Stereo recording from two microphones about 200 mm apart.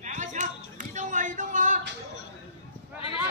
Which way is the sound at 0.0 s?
40° right (ahead or behind).